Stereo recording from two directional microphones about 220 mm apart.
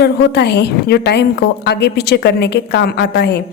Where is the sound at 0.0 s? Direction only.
50° left (ahead or behind).